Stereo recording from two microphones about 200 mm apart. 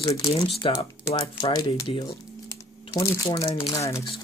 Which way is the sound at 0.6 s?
25° left (ahead or behind).